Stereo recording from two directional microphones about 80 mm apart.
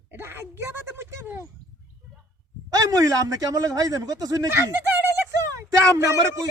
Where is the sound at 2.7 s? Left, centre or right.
Right.